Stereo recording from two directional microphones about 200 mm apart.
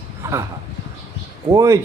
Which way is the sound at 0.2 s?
15° right (ahead or behind).